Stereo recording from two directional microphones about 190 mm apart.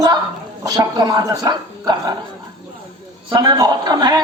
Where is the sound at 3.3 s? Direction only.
25° right (ahead or behind).